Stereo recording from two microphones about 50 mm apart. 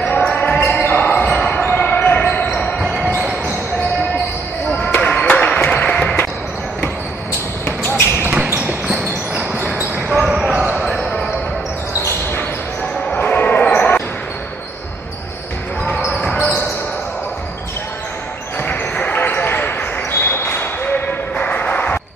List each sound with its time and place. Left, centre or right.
0.0 s basketball bounce: left
4.7 s basketball bounce: left
5.2 s a sound: left
5.7 s music: left
7.6 s basketball bounce: left
8.5 s basketball bounce: right
10.2 s basketball bounce: centre
10.8 s basketball bounce: centre
13.1 s basketball bounce: left
16.1 s basketball bounce: centre
16.3 s basketball bounce: left
18.7 s basketball bounce: left